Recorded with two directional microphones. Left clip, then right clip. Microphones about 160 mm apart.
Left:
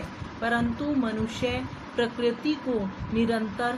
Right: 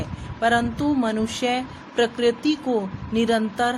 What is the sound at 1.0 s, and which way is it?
A woman's voice, 70° right (ahead or behind).